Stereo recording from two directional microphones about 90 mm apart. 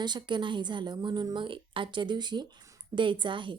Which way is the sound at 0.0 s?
55° right (ahead or behind).